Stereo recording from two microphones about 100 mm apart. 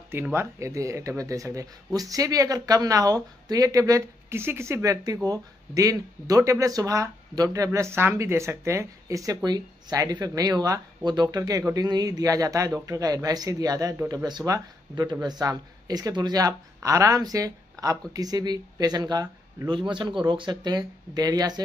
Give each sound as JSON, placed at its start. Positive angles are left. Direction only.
{"t": 0.1, "sound": "speech", "side_deg": -25}
{"t": 4.4, "sound": "speech", "side_deg": -25}